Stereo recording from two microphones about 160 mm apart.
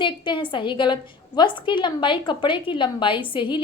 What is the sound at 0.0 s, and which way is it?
A woman's voice, 30° left (ahead or behind).